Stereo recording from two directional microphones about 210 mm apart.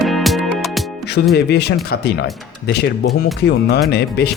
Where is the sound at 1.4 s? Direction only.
50° left (ahead or behind).